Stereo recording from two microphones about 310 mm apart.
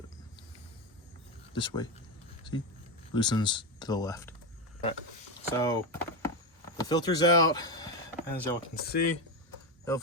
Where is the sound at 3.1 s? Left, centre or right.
Centre.